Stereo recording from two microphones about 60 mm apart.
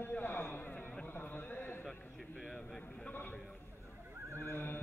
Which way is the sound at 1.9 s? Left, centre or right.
Centre.